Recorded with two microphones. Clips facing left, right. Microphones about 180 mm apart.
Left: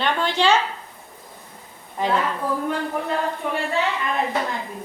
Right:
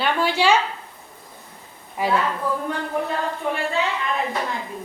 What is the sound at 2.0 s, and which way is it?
Speech, 10° right (ahead or behind).